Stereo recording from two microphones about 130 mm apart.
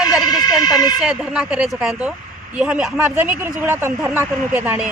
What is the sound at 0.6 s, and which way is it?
Speech, 30° left (ahead or behind).